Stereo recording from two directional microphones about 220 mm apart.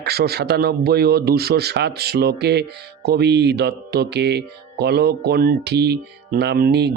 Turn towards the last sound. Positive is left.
turn(degrees=-50)  # may be behind; listen again after turning